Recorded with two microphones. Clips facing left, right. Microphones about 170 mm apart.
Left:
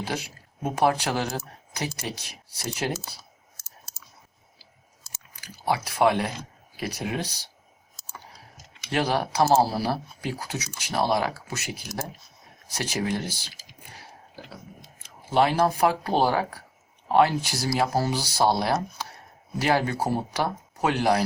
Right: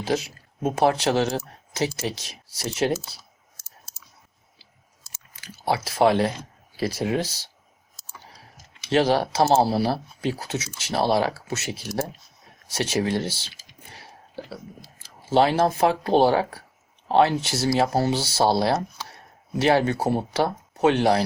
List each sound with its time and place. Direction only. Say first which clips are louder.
0.6 s speech: right 3 dB; 25° right (ahead or behind)
5.4 s speech: right 1 dB; 25° right (ahead or behind)
8.9 s speech: right 5 dB; 30° right (ahead or behind)